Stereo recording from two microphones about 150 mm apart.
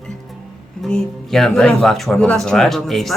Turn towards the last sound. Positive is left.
turn(degrees=0)  # may be behind; listen again after turning